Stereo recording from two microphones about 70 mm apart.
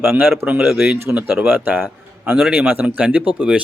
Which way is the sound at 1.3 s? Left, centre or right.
Right.